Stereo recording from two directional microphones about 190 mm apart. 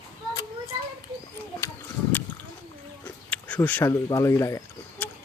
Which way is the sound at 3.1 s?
5° left (ahead or behind).